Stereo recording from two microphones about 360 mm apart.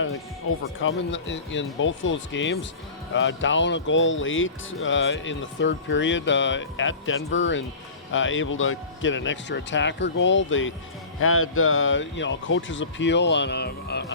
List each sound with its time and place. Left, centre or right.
0.5 s speech: left